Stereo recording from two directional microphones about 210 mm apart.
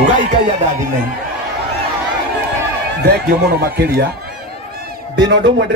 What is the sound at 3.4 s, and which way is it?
Speech, 50° right (ahead or behind).